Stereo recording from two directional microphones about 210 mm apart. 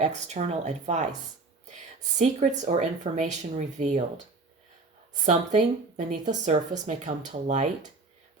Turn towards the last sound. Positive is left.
turn(degrees=-35)  # may be behind; listen again after turning